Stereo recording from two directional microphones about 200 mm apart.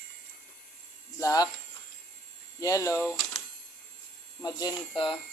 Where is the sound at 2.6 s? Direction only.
15° left (ahead or behind).